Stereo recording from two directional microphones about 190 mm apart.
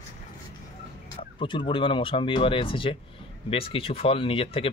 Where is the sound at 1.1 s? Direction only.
25° left (ahead or behind).